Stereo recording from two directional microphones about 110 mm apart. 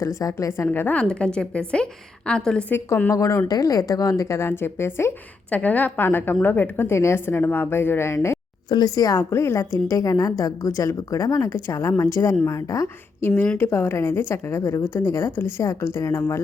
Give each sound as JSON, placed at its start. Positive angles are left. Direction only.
{"t": 0.0, "sound": "a woman's voice", "side_deg": 30}
{"t": 8.7, "sound": "a woman's voice", "side_deg": 35}